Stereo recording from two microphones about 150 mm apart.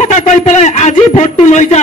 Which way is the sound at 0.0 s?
50° left (ahead or behind).